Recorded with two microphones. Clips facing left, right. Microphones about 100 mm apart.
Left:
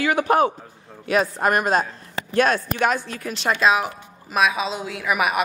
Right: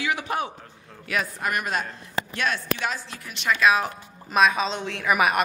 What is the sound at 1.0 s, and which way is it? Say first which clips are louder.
A man's voice: left 8 dB; 30° left (ahead or behind).